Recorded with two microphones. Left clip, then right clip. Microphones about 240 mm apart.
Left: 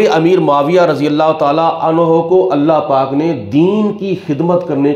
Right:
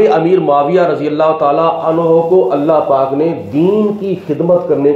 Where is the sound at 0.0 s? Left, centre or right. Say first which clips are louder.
Even; left.